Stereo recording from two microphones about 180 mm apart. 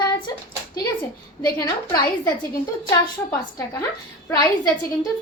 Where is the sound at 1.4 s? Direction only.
20° left (ahead or behind).